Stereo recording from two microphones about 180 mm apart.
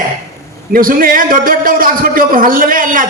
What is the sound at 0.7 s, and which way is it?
A man's voice, 50° right (ahead or behind).